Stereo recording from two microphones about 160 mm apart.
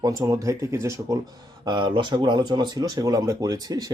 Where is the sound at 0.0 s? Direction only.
20° right (ahead or behind).